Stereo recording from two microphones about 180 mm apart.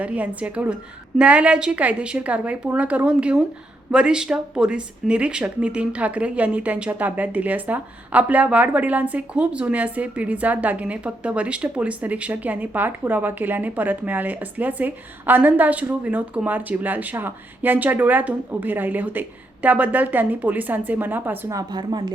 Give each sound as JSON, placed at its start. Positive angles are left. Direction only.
{"t": 0.0, "sound": "speech", "side_deg": -5}
{"t": 21.7, "sound": "a woman's voice", "side_deg": -25}